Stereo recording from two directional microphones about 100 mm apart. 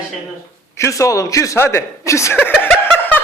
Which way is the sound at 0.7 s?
30° left (ahead or behind).